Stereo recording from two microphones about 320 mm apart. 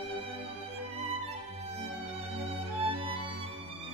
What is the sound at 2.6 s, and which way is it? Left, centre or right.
Music, centre.